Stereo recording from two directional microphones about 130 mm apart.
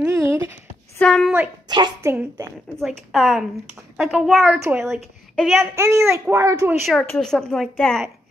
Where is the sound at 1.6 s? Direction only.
30° right (ahead or behind).